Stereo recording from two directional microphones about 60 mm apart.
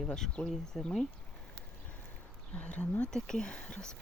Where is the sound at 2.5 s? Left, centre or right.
Left.